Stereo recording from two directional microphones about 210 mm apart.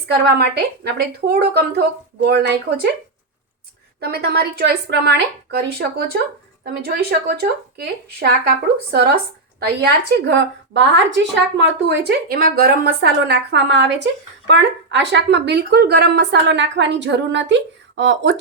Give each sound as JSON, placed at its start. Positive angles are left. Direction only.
{"t": 0.1, "sound": "speech", "side_deg": -50}
{"t": 4.0, "sound": "a woman's voice", "side_deg": -50}